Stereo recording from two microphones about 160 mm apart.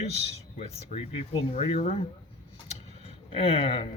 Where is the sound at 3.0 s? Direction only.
40° left (ahead or behind).